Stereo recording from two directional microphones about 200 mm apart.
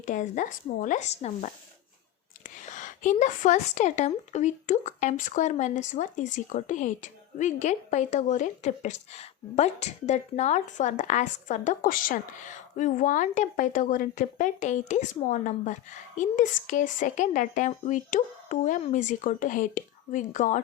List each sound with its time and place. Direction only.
0.0 s a woman's voice: 40° left (ahead or behind)
2.6 s a woman's voice: 40° left (ahead or behind)